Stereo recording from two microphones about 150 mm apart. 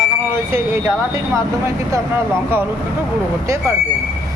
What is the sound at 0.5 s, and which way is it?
Speech, 15° right (ahead or behind).